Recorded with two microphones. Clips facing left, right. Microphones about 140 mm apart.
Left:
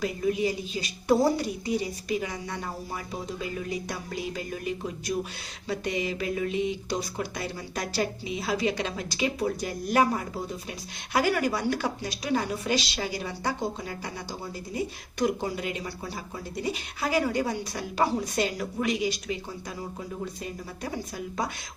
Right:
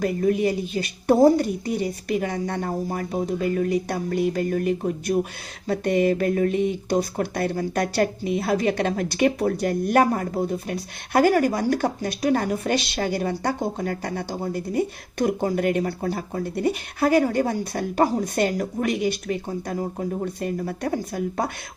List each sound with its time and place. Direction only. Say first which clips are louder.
0.0 s speech: right 6 dB; 50° right (ahead or behind)